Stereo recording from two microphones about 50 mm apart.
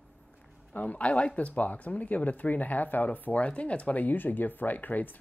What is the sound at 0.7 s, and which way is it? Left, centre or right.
Speech, left.